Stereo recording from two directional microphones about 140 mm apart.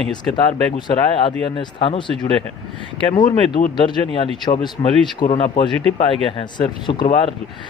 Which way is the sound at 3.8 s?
35° left (ahead or behind).